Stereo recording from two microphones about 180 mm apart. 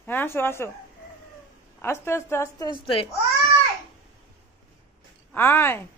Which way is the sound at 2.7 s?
30° left (ahead or behind).